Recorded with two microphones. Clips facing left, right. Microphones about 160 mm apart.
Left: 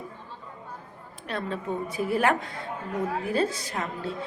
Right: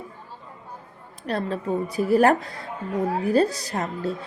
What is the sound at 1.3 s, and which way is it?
A woman's voice, 35° right (ahead or behind).